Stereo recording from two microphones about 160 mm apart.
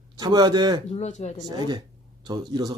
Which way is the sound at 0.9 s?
45° left (ahead or behind).